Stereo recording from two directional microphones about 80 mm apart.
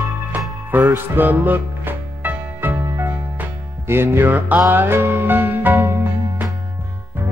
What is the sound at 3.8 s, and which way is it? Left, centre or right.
Music, right.